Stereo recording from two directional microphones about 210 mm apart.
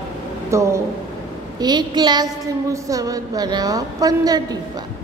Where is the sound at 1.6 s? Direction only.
20° right (ahead or behind).